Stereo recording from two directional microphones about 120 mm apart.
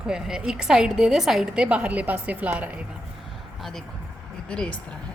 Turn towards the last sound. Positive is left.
turn(degrees=10)  # may be behind; listen again after turning